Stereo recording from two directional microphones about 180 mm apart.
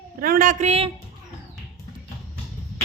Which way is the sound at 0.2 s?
50° right (ahead or behind).